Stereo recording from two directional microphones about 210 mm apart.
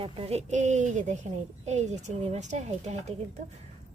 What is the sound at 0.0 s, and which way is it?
A woman's voice, 30° right (ahead or behind).